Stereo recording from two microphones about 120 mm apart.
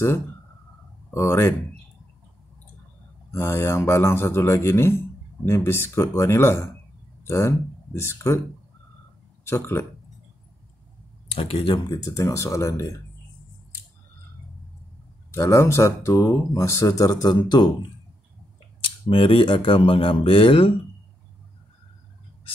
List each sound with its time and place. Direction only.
1.1 s speech: 20° left (ahead or behind)
3.3 s speech: 20° left (ahead or behind)
9.4 s speech: 20° left (ahead or behind)
11.3 s speech: 50° left (ahead or behind)
11.9 s speech: 30° left (ahead or behind)
15.3 s speech: 25° left (ahead or behind)
19.0 s speech: 50° left (ahead or behind)